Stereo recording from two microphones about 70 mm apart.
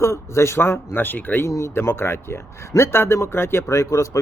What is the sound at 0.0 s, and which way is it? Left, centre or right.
Speech, left.